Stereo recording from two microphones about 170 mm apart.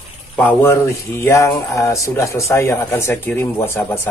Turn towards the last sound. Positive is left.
turn(degrees=15)  # may be behind; listen again after turning